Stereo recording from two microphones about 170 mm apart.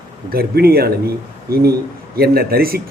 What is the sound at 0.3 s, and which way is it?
Speech, 65° right (ahead or behind).